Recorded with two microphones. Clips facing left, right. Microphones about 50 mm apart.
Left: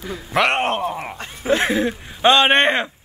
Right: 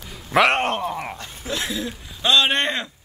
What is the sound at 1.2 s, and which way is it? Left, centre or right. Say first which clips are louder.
Speech: left 9 dB; left.